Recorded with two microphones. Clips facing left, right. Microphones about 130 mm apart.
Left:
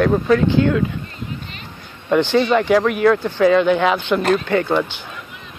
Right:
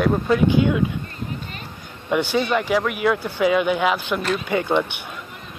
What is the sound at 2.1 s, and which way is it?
Speech, 10° right (ahead or behind).